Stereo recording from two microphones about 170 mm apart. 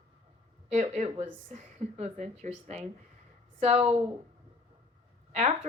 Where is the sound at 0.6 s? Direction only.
40° right (ahead or behind).